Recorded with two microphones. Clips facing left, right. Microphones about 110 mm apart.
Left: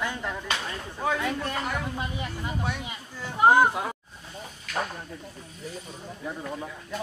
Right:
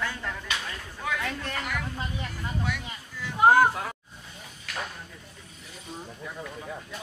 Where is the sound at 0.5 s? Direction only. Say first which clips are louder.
Left 3 dB; 30° left (ahead or behind).